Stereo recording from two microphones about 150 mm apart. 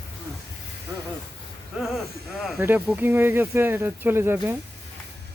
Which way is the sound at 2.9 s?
10° right (ahead or behind).